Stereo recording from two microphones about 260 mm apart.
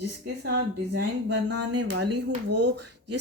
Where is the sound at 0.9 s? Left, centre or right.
Right.